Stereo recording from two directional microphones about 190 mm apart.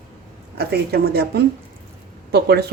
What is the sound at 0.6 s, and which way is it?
Speech, 55° right (ahead or behind).